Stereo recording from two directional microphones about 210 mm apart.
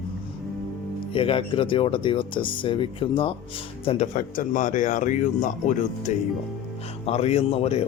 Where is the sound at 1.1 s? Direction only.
25° left (ahead or behind).